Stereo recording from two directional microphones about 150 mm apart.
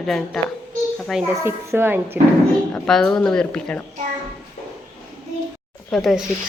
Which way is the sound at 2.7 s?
5° left (ahead or behind).